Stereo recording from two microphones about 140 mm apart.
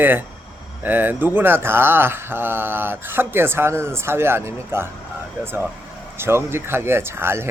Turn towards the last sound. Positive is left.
turn(degrees=-15)  # may be behind; listen again after turning